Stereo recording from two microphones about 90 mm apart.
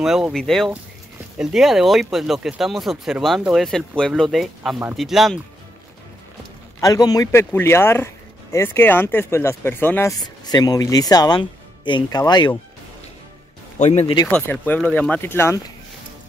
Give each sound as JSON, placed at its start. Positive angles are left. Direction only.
{"t": 0.0, "sound": "speech", "side_deg": -5}
{"t": 6.8, "sound": "a man's voice", "side_deg": 45}
{"t": 7.2, "sound": "speech", "side_deg": 25}
{"t": 10.2, "sound": "speech", "side_deg": 50}
{"t": 14.3, "sound": "speech", "side_deg": 20}